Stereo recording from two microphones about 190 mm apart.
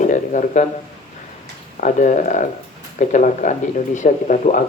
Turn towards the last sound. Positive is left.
turn(degrees=40)  # may be behind; listen again after turning